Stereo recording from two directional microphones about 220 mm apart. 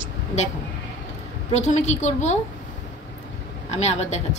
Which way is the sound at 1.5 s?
30° left (ahead or behind).